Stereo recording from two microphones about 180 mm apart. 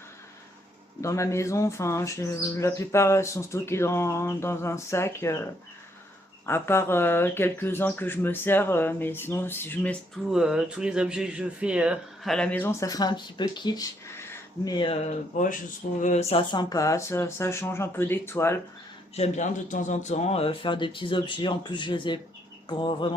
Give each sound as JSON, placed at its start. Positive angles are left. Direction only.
{"t": 1.0, "sound": "speech", "side_deg": 15}
{"t": 19.1, "sound": "a man's voice", "side_deg": 40}